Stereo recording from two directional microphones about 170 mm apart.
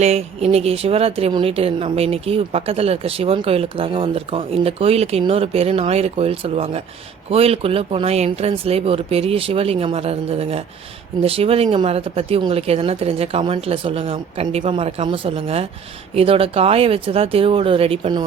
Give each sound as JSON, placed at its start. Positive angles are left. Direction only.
{"t": 0.0, "sound": "speech", "side_deg": -40}